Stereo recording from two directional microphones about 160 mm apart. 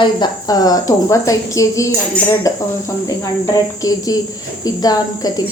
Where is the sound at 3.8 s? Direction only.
25° left (ahead or behind).